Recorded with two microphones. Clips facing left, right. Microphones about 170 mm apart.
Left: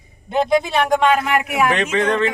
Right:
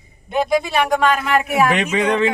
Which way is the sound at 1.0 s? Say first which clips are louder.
Even; 20° left (ahead or behind).